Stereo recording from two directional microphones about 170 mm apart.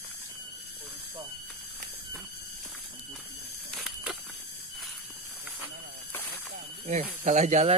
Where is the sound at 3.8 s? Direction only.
5° right (ahead or behind).